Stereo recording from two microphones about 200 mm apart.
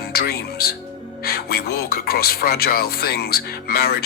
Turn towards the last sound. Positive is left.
turn(degrees=50)  # may be behind; listen again after turning